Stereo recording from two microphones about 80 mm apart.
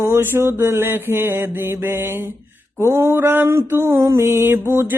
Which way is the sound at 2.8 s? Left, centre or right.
Right.